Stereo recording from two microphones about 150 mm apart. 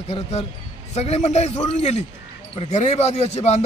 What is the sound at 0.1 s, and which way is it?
A man's voice, 45° left (ahead or behind).